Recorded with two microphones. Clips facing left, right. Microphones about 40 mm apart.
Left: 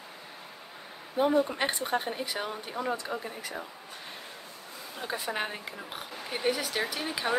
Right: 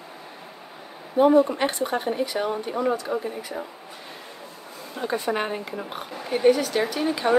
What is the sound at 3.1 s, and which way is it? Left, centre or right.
Speech, centre.